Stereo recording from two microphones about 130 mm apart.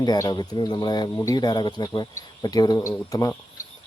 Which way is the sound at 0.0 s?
30° left (ahead or behind).